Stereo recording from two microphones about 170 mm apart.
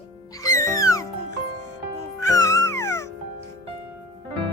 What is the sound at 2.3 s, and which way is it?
Music, 20° left (ahead or behind).